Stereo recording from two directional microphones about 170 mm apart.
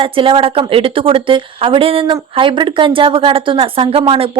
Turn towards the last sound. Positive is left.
turn(degrees=-30)  # may be behind; listen again after turning